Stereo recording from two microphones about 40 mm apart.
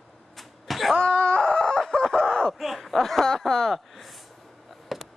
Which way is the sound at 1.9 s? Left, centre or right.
Centre.